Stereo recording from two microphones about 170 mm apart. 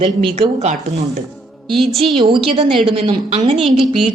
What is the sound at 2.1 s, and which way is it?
Speech, 30° right (ahead or behind).